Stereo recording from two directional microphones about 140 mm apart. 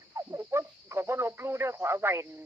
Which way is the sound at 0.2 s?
20° right (ahead or behind).